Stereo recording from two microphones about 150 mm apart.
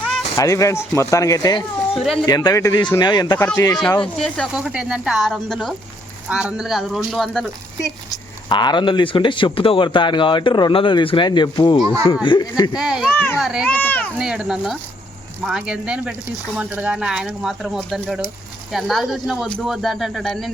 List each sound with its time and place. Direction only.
0.3 s speech: 20° left (ahead or behind)
2.0 s speech: centre (ahead or behind)
2.2 s speech: 25° left (ahead or behind)
3.8 s speech: 5° left (ahead or behind)
4.6 s speech: 5° right (ahead or behind)
8.1 s speech: 30° left (ahead or behind)
12.7 s speech: 5° right (ahead or behind)
13.1 s a child's voice: 10° left (ahead or behind)
13.4 s speech: 5° right (ahead or behind)
13.7 s speech: 10° left (ahead or behind)
14.2 s speech: 5° right (ahead or behind)